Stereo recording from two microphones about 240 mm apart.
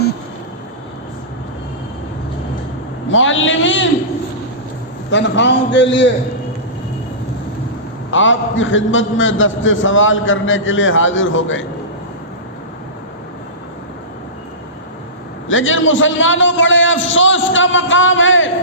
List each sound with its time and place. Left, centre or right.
3.1 s a man's voice: left
5.1 s a man's voice: left
8.1 s a man's voice: left
15.4 s a man's voice: left